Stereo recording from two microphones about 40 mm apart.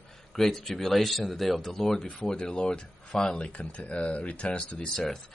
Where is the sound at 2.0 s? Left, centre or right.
Centre; by 4.7 s left.